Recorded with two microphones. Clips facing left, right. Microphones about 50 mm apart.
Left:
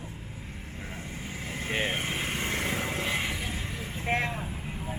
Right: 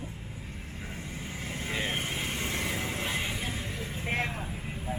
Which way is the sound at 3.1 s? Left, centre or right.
Left.